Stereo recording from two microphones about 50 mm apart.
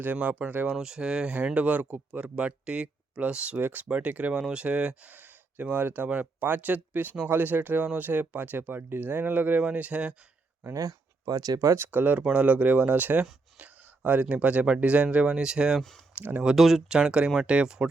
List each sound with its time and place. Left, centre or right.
0.0 s speech: right
0.7 s speech: centre
1.5 s speech: right
3.6 s speech: right
3.8 s speech: right
5.1 s speech: right
10.6 s speech: right
11.8 s speech: right; by 15.8 s centre
16.1 s speech: right
16.6 s speech: centre